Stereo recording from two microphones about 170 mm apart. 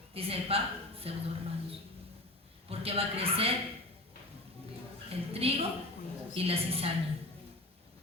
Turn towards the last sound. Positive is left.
turn(degrees=-35)  # may be behind; listen again after turning